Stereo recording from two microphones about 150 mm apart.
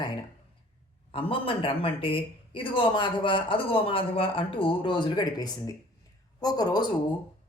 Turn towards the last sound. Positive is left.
turn(degrees=30)  # may be behind; listen again after turning